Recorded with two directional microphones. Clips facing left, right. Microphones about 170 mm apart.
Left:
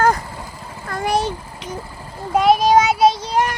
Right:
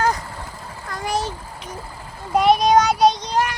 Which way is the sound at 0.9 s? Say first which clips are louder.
Left 5 dB; 60° left (ahead or behind).